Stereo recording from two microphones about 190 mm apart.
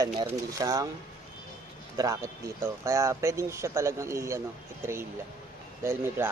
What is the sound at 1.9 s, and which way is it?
Speech, 20° right (ahead or behind).